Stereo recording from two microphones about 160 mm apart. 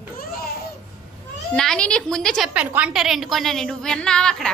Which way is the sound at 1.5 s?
5° left (ahead or behind).